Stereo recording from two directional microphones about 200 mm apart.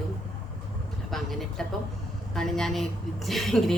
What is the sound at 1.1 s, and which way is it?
A woman's voice, centre (ahead or behind).